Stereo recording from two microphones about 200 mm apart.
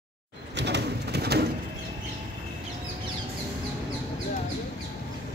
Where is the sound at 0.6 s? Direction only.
60° right (ahead or behind).